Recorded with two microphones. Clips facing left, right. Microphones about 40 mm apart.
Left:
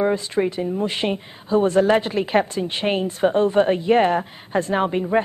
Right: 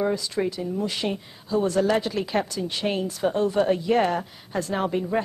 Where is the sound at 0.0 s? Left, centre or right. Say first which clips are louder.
Left 4 dB; left.